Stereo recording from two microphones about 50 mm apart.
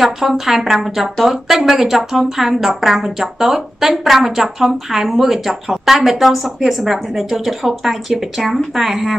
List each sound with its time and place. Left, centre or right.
0.0 s speech: centre